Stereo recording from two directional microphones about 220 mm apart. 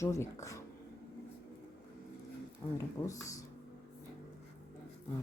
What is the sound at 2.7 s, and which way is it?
Speech, 15° left (ahead or behind).